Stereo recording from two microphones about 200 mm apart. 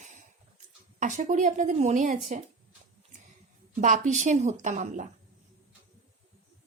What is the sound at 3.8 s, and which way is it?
Speech, 40° right (ahead or behind).